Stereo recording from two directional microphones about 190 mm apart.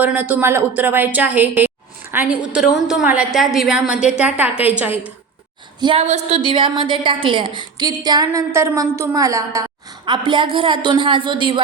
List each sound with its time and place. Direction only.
0.0 s a woman's voice: 10° right (ahead or behind)
5.8 s a woman's voice: 30° right (ahead or behind)